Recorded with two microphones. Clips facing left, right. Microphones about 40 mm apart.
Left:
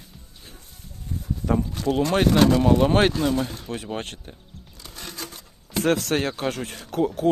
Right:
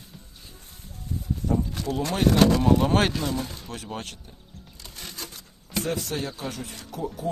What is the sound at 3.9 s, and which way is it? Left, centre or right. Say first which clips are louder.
Speech: left 4 dB; left.